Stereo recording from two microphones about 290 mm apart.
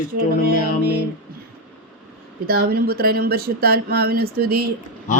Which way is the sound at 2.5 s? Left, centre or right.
Right.